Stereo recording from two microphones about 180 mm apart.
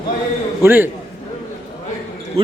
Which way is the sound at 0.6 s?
10° right (ahead or behind).